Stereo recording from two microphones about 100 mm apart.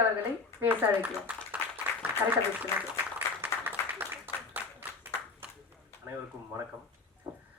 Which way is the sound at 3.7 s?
20° right (ahead or behind).